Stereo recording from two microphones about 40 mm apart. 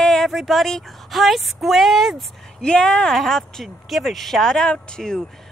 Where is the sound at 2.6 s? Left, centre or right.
Left.